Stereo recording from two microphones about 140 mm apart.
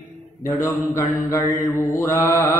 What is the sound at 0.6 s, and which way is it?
Mantra, 20° left (ahead or behind).